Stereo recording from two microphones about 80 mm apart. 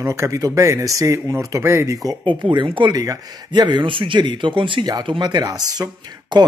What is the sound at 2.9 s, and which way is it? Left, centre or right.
Speech, right.